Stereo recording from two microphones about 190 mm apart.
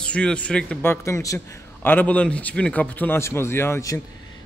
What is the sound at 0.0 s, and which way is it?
A man's voice, 5° left (ahead or behind).